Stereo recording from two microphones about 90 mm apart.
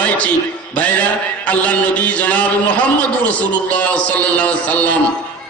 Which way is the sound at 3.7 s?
15° left (ahead or behind).